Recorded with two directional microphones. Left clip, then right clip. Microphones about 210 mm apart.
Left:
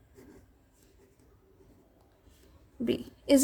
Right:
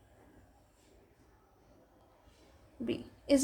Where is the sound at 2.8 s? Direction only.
40° left (ahead or behind).